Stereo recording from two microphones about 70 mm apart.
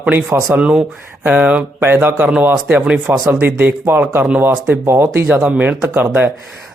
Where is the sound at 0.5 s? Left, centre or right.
Centre.